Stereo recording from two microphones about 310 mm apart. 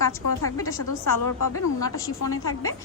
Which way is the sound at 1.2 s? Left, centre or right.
Left.